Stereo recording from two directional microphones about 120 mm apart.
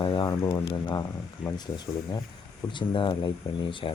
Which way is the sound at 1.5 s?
35° left (ahead or behind).